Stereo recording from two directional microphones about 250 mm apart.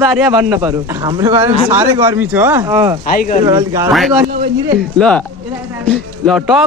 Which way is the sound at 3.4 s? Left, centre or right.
Centre.